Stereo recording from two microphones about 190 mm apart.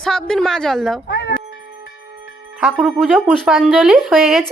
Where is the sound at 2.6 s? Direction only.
Centre (ahead or behind).